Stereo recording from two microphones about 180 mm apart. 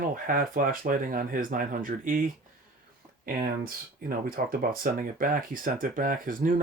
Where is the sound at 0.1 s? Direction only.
50° right (ahead or behind).